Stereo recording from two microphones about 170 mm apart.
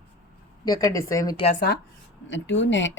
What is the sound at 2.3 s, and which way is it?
Speech, 90° left.